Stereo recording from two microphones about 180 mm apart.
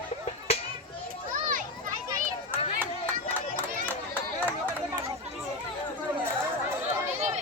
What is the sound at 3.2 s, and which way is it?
Run, 10° left (ahead or behind).